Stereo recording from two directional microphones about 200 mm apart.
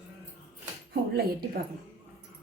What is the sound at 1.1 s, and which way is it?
Speech, 50° right (ahead or behind).